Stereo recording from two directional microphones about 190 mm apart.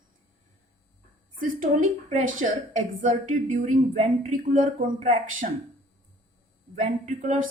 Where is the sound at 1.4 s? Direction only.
45° right (ahead or behind).